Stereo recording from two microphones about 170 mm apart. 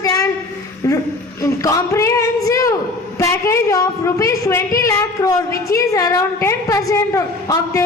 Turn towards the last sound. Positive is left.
turn(degrees=15)  # may be behind; listen again after turning